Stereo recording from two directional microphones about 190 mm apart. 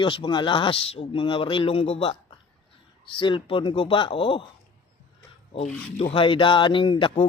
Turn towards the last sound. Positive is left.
turn(degrees=25)  # may be behind; listen again after turning